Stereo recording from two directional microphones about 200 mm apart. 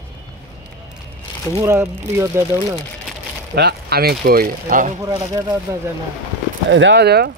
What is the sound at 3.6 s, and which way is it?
Speech, 55° right (ahead or behind).